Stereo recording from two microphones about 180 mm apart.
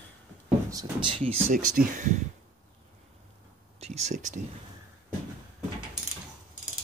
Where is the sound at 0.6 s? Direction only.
25° right (ahead or behind).